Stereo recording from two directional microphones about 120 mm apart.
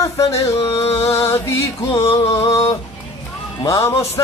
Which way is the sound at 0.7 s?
55° left (ahead or behind).